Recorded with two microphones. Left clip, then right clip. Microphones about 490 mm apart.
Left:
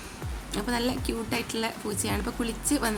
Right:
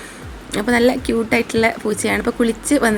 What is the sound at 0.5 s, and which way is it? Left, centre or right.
Speech, left.